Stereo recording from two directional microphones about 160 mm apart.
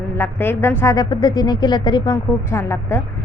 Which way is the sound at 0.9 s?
25° left (ahead or behind).